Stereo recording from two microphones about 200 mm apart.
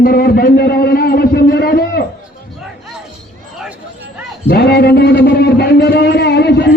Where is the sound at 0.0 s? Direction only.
50° left (ahead or behind).